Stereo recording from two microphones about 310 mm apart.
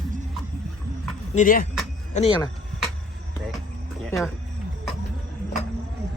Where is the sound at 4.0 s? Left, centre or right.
Centre.